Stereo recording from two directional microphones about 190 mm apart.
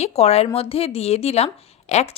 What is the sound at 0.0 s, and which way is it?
A woman's voice, 35° left (ahead or behind).